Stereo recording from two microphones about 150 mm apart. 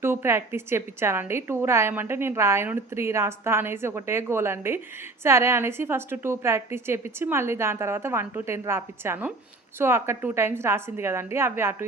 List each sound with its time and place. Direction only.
0.0 s a woman's voice: 15° right (ahead or behind)